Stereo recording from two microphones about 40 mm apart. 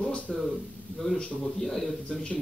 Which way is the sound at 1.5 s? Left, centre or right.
Centre.